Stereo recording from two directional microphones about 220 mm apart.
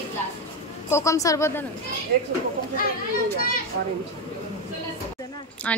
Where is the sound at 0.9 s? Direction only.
15° left (ahead or behind).